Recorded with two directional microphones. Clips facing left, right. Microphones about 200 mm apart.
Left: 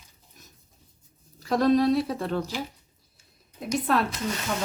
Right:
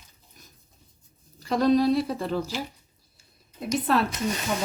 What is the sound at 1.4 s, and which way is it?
A woman's voice, centre (ahead or behind).